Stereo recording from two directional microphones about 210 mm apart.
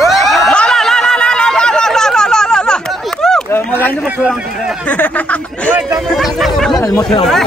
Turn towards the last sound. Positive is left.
turn(degrees=15)  # may be behind; listen again after turning